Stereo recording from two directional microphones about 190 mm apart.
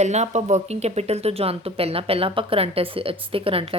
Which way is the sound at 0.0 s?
35° right (ahead or behind).